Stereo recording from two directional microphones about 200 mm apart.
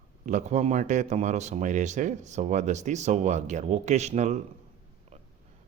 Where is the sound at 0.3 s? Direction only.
35° right (ahead or behind).